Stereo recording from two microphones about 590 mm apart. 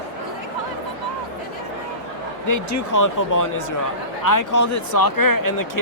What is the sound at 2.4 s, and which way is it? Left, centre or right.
Speech, left.